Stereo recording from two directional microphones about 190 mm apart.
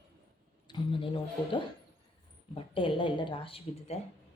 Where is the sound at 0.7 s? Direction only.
25° left (ahead or behind).